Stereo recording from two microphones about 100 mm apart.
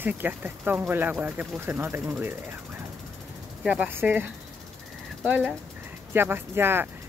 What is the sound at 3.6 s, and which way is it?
Speech, 10° right (ahead or behind).